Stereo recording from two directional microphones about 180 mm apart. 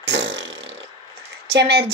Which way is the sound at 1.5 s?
65° right (ahead or behind).